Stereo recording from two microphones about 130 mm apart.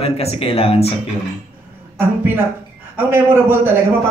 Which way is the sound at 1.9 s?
15° right (ahead or behind).